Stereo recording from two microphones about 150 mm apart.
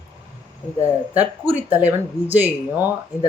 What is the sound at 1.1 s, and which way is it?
Speech, 10° right (ahead or behind).